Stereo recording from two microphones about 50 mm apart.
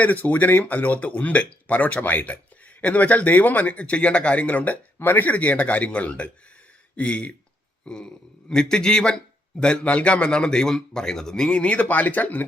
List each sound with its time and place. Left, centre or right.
0.0 s speech: left
4.9 s a man's voice: left